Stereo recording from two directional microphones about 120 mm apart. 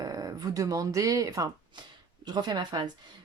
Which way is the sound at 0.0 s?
30° right (ahead or behind).